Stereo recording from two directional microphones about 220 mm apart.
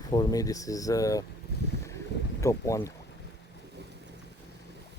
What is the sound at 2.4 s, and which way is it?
Speech, 15° left (ahead or behind).